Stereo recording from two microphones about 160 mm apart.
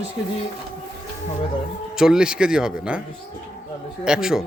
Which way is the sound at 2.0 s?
5° right (ahead or behind).